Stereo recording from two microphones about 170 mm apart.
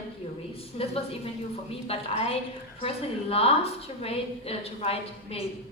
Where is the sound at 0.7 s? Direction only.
40° left (ahead or behind).